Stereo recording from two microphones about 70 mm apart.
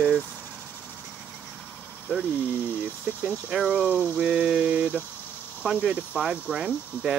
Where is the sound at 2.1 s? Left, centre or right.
Left.